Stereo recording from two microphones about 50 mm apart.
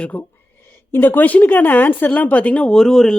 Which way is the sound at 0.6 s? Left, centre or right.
Left.